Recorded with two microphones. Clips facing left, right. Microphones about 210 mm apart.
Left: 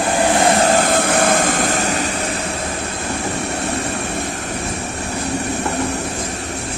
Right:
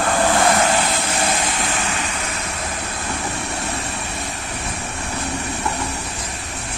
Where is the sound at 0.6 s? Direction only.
45° left (ahead or behind).